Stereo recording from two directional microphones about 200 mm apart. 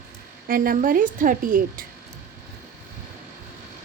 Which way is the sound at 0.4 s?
45° right (ahead or behind).